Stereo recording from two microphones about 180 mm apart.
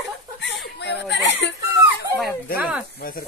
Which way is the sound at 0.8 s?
75° left (ahead or behind).